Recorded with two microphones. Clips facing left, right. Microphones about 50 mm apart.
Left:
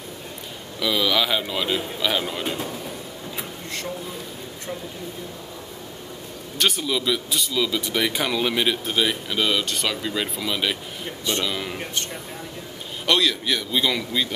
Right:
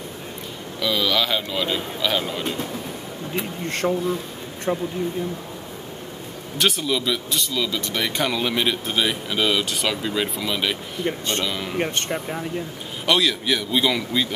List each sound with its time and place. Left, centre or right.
0.7 s speech: centre
3.6 s speech: right
6.6 s speech: centre
11.1 s speech: right
11.4 s speech: centre
11.8 s speech: right
13.0 s speech: centre